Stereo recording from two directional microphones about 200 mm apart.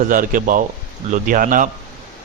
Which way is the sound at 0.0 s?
40° right (ahead or behind).